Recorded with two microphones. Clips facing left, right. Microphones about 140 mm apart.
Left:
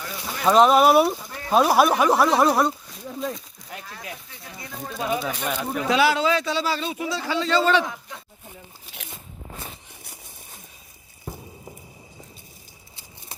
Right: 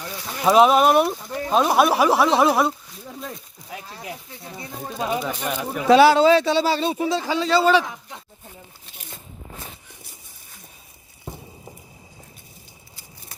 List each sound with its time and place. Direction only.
0.4 s speech: 5° right (ahead or behind)
3.8 s speech: 30° right (ahead or behind)
5.2 s speech: 10° right (ahead or behind)
5.9 s speech: 30° right (ahead or behind); by 7.9 s 10° right (ahead or behind)